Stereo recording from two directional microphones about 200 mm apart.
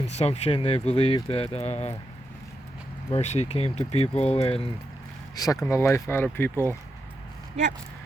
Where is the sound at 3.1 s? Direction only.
35° left (ahead or behind).